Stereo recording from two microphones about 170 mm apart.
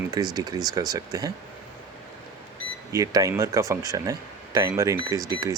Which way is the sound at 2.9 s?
20° right (ahead or behind).